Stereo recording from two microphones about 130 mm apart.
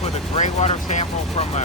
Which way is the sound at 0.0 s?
55° left (ahead or behind).